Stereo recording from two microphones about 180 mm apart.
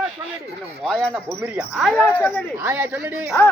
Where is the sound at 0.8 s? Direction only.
5° right (ahead or behind).